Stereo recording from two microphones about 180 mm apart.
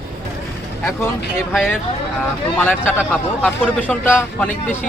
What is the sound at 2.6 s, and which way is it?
A man's voice, 10° left (ahead or behind).